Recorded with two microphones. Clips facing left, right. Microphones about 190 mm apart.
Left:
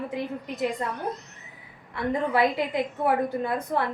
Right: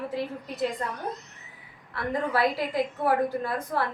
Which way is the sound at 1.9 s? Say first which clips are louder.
Left 2 dB; 20° left (ahead or behind).